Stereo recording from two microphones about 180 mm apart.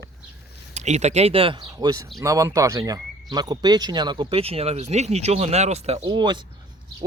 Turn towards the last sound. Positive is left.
turn(degrees=-25)  # may be behind; listen again after turning